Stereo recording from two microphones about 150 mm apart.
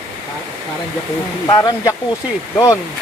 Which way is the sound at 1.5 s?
20° left (ahead or behind).